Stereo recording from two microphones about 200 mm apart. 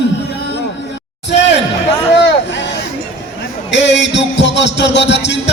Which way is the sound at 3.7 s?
65° left (ahead or behind).